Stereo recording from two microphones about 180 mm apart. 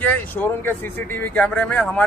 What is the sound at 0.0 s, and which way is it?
A man's voice, 10° left (ahead or behind).